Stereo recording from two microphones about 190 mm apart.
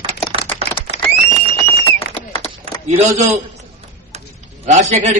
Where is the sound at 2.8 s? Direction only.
35° right (ahead or behind).